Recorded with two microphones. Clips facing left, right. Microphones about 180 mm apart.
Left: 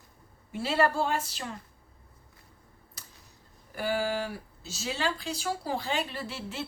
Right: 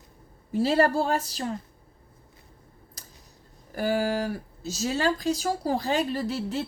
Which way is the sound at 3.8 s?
40° right (ahead or behind).